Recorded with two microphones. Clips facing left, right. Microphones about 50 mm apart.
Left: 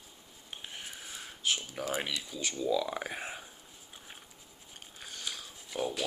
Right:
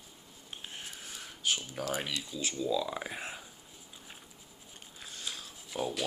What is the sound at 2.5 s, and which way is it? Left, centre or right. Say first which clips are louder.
Speech: left 2 dB; left.